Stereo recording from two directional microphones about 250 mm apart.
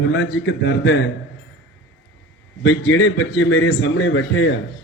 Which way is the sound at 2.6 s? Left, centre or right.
Left.